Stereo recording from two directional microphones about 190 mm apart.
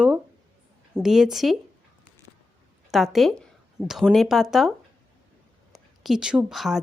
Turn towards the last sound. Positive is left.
turn(degrees=0)  # may be behind; listen again after turning